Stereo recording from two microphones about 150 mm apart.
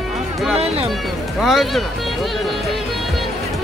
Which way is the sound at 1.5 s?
Centre (ahead or behind).